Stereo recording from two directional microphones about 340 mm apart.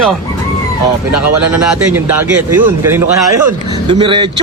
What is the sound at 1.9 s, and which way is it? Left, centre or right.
Speech, centre.